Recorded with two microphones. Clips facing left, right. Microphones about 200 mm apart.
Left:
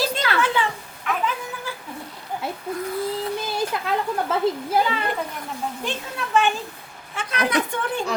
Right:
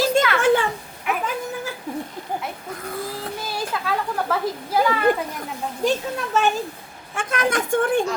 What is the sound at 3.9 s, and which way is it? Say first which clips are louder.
Speech: even; 25° left (ahead or behind).